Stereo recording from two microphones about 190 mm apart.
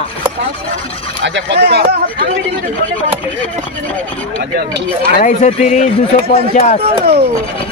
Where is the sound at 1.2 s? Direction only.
70° right (ahead or behind).